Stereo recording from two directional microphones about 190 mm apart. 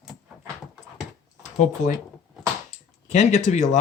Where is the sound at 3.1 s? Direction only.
35° left (ahead or behind).